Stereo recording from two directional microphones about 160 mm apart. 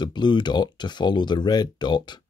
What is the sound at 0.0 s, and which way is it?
Speech, 30° left (ahead or behind).